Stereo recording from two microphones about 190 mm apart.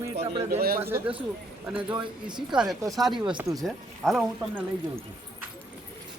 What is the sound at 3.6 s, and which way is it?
Speech, centre (ahead or behind).